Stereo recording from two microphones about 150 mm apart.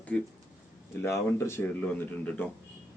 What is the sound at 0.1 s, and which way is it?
Speech, 5° left (ahead or behind).